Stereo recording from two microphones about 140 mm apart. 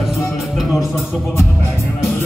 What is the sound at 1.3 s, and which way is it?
Music, 15° left (ahead or behind).